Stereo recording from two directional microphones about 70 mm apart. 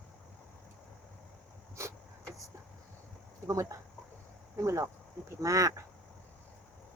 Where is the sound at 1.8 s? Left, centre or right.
Right.